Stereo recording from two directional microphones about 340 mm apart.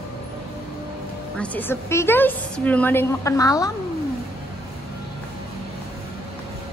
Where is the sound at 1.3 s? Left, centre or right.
Centre.